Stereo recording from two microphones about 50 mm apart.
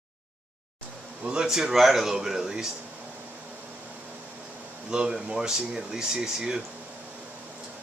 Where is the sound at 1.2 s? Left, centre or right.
Centre.